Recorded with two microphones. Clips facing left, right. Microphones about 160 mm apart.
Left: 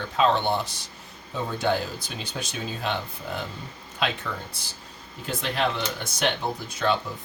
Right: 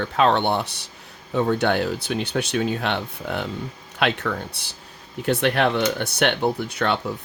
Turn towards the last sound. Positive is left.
turn(degrees=-65)  # may be behind; listen again after turning